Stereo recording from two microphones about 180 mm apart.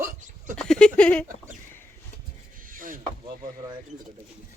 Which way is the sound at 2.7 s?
50° right (ahead or behind).